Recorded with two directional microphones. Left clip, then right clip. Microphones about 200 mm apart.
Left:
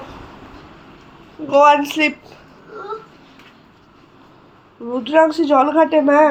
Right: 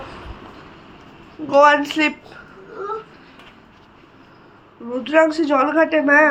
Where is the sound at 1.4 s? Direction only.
5° left (ahead or behind).